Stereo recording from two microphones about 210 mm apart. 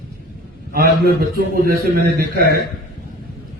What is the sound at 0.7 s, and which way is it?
A man's voice, 45° right (ahead or behind).